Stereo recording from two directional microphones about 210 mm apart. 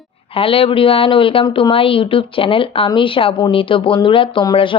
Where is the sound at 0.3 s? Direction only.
25° left (ahead or behind).